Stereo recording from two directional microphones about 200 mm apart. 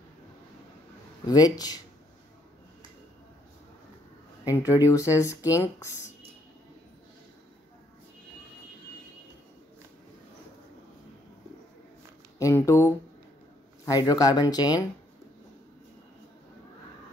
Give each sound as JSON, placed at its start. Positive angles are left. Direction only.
{"t": 1.2, "sound": "speech", "side_deg": 20}
{"t": 4.5, "sound": "speech", "side_deg": 15}
{"t": 12.4, "sound": "speech", "side_deg": 15}